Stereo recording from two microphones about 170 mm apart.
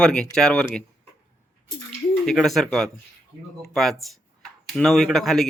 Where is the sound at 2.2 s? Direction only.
Centre (ahead or behind).